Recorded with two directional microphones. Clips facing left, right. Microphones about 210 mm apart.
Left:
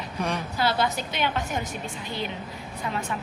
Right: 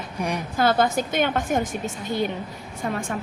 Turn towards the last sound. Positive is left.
turn(degrees=-50)  # may be behind; listen again after turning